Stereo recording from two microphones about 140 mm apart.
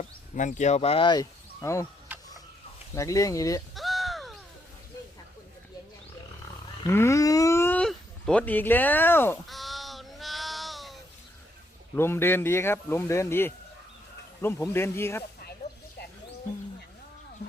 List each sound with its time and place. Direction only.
0.0 s speech: 60° left (ahead or behind); by 1.9 s 20° left (ahead or behind)
2.1 s a sound: 10° right (ahead or behind)
2.9 s speech: 20° left (ahead or behind)
3.8 s a sound: centre (ahead or behind)
6.8 s speech: 20° left (ahead or behind)
9.5 s child singing: centre (ahead or behind)
11.9 s speech: 15° left (ahead or behind)